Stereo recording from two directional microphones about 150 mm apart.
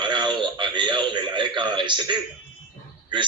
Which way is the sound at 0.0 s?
30° right (ahead or behind).